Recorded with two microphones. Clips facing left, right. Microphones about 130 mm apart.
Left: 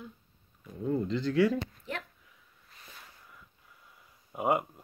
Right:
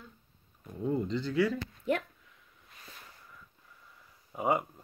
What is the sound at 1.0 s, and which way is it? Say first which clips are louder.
Speech: left 5 dB; centre (ahead or behind).